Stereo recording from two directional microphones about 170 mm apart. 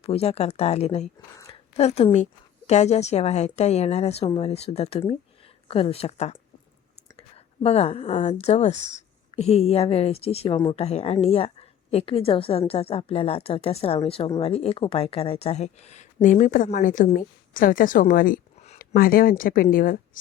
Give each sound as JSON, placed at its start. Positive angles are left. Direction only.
{"t": 0.0, "sound": "a woman's voice", "side_deg": 35}
{"t": 1.5, "sound": "a sound", "side_deg": 40}
{"t": 2.6, "sound": "a woman's voice", "side_deg": 40}
{"t": 10.8, "sound": "a woman's voice", "side_deg": 35}